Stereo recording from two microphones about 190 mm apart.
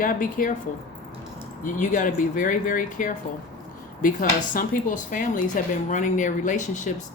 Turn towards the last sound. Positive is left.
turn(degrees=40)  # may be behind; listen again after turning